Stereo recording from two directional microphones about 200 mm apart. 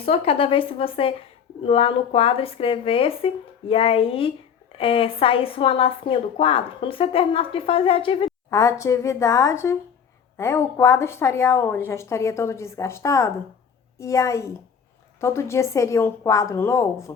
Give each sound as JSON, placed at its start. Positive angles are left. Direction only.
{"t": 0.0, "sound": "speech", "side_deg": 30}
{"t": 8.4, "sound": "a woman's voice", "side_deg": 15}